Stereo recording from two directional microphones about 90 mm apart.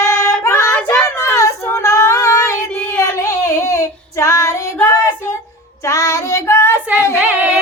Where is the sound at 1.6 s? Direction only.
30° left (ahead or behind).